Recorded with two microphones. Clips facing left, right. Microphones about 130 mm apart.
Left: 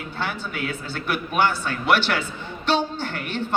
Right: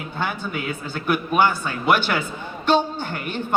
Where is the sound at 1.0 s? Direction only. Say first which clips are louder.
Right 3 dB; 45° right (ahead or behind).